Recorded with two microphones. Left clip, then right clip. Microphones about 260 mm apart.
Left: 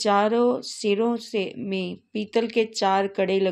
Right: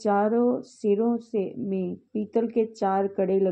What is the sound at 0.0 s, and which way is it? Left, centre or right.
A woman's voice, centre.